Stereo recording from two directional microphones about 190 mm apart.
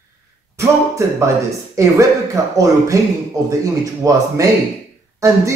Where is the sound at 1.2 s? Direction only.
15° right (ahead or behind).